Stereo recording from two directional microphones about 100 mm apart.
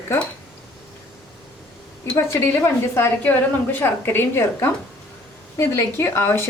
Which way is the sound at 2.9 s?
20° left (ahead or behind).